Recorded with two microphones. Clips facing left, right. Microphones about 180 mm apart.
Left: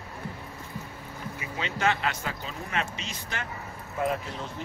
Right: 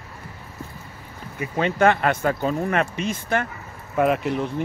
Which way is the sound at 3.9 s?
70° right (ahead or behind).